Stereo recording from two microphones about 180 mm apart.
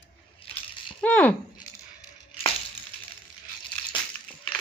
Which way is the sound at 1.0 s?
10° left (ahead or behind).